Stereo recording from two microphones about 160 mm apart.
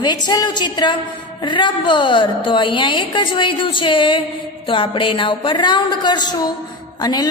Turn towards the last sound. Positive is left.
turn(degrees=25)  # may be behind; listen again after turning